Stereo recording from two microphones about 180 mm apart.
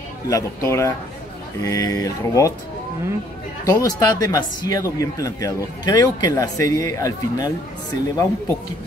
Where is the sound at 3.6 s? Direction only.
20° left (ahead or behind).